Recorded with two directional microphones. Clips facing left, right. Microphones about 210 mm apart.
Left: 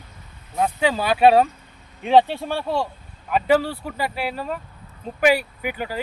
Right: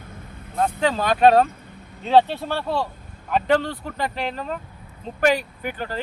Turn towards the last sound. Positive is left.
turn(degrees=10)  # may be behind; listen again after turning